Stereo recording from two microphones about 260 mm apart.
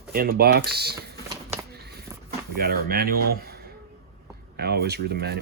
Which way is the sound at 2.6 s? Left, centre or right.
Right.